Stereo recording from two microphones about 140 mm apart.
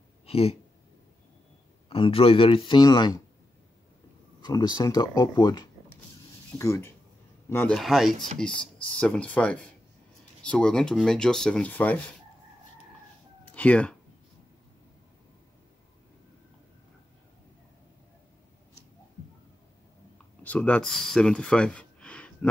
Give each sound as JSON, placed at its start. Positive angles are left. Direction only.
{"t": 0.3, "sound": "speech", "side_deg": 45}
{"t": 1.9, "sound": "speech", "side_deg": 40}
{"t": 4.4, "sound": "speech", "side_deg": 30}
{"t": 7.6, "sound": "speech", "side_deg": 0}
{"t": 13.5, "sound": "speech", "side_deg": 10}
{"t": 20.4, "sound": "speech", "side_deg": 10}